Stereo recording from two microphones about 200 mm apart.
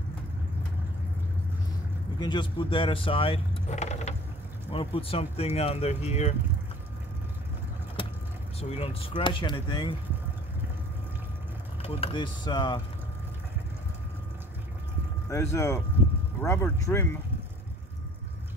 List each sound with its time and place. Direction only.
2.1 s speech: 25° left (ahead or behind)
8.5 s speech: 30° left (ahead or behind)
11.8 s speech: 30° left (ahead or behind)
15.2 s speech: 15° left (ahead or behind)